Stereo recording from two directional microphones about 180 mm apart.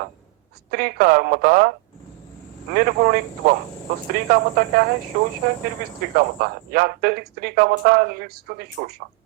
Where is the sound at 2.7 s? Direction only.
55° right (ahead or behind).